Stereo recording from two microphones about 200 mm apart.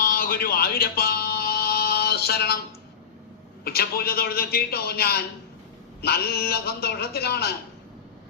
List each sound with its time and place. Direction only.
0.0 s music: 45° left (ahead or behind)
3.6 s a man's voice: 50° left (ahead or behind)